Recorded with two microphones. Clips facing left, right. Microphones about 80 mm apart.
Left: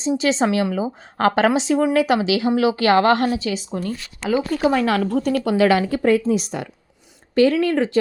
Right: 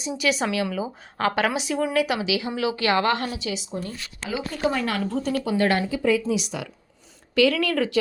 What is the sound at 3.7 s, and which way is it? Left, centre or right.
Speech, left.